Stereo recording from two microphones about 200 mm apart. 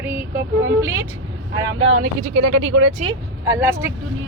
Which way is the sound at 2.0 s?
60° right (ahead or behind).